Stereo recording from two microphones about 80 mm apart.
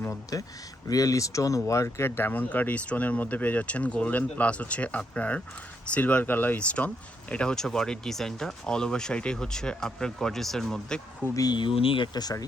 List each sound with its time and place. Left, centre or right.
0.3 s speech: left; by 11.0 s centre
11.2 s speech: left
11.5 s speech: left